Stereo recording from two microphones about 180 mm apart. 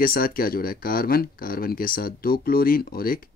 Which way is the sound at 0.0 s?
50° left (ahead or behind).